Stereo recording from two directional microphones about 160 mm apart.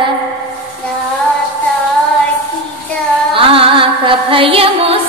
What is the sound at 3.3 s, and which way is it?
Music, 35° right (ahead or behind).